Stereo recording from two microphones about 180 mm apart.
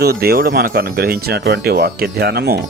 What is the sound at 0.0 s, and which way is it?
Speech, 60° right (ahead or behind).